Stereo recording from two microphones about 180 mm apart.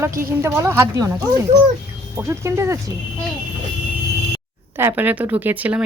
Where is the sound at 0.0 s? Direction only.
15° right (ahead or behind).